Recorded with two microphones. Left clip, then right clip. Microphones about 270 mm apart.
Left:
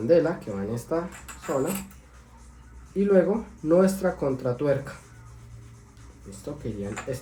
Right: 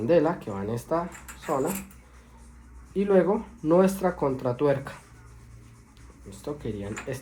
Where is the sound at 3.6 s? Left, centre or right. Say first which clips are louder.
Left 1 dB; centre.